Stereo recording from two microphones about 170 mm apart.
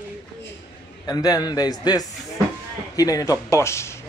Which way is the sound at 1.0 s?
20° left (ahead or behind).